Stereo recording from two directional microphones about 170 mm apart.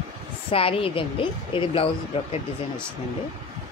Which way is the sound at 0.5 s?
35° left (ahead or behind).